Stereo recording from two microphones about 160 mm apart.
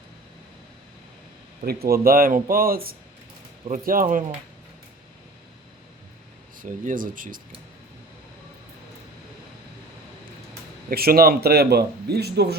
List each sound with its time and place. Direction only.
1.6 s speech: 70° right (ahead or behind)
6.6 s speech: 60° right (ahead or behind)
10.8 s speech: 70° right (ahead or behind); by 12.5 s 90° right